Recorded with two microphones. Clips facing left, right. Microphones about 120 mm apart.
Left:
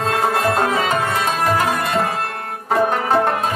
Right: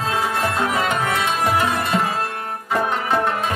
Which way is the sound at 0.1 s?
50° left (ahead or behind).